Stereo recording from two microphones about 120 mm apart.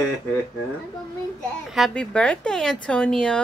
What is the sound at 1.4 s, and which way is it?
A woman's voice, centre (ahead or behind).